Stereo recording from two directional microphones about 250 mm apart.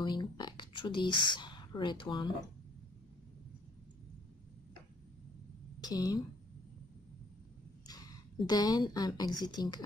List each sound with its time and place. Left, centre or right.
0.0 s speech: centre
5.8 s a woman's voice: centre
8.5 s a woman's voice: centre